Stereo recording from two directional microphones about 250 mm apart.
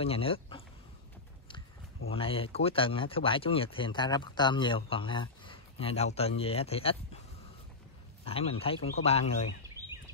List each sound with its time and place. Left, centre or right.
0.0 s speech: left
2.0 s speech: left
8.3 s speech: left
9.8 s a sound: centre